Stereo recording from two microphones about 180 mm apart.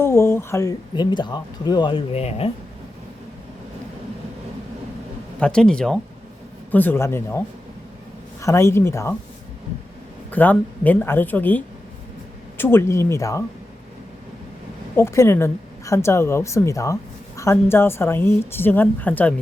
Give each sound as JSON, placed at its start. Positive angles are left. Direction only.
{"t": 0.0, "sound": "speech", "side_deg": 15}
{"t": 5.4, "sound": "a woman's voice", "side_deg": 5}
{"t": 10.3, "sound": "a woman's voice", "side_deg": 10}
{"t": 14.9, "sound": "a woman's voice", "side_deg": 15}